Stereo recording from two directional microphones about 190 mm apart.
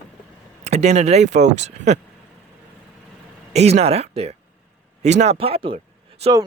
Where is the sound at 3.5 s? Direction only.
35° right (ahead or behind).